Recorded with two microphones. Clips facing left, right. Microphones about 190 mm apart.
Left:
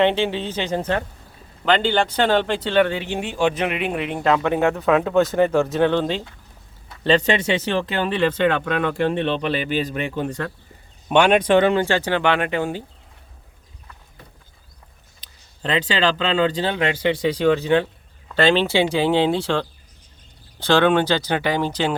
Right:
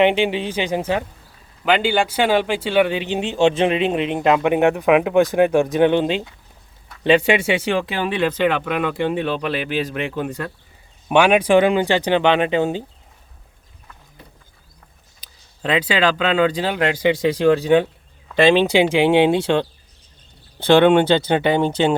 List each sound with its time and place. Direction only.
0.0 s speech: 15° right (ahead or behind)
15.2 s speech: 10° right (ahead or behind)
20.7 s speech: 20° right (ahead or behind)